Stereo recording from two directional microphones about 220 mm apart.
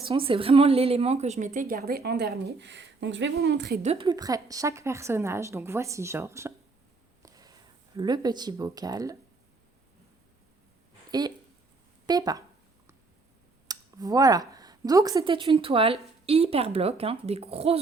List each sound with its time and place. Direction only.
0.0 s a woman's voice: 25° right (ahead or behind); by 3.8 s 45° right (ahead or behind)
3.8 s a woman's voice: 25° right (ahead or behind)
7.2 s a sound: 15° right (ahead or behind)
7.9 s a woman's voice: 20° right (ahead or behind)
11.1 s a woman's voice: 20° right (ahead or behind)
13.7 s speech: 15° right (ahead or behind)